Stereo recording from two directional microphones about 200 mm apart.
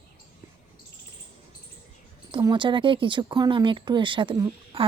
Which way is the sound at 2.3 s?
20° right (ahead or behind).